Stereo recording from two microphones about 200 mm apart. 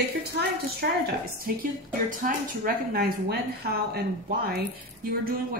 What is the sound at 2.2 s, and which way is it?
Speech, 45° right (ahead or behind).